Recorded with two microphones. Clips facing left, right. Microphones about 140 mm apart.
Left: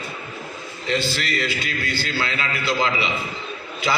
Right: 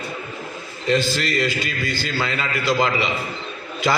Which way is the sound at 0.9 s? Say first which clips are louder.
Right 4 dB; 45° right (ahead or behind).